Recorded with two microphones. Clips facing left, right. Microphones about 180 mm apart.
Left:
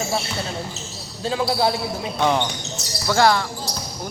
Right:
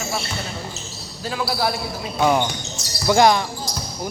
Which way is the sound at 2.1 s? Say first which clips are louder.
Right 2 dB; 5° right (ahead or behind).